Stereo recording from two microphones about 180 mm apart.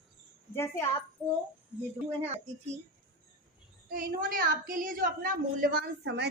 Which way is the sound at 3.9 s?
50° right (ahead or behind).